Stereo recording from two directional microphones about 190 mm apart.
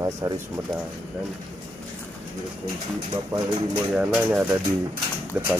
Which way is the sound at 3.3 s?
15° right (ahead or behind).